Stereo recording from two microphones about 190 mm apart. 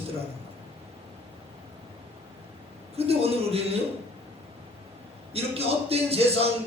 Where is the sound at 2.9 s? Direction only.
30° right (ahead or behind).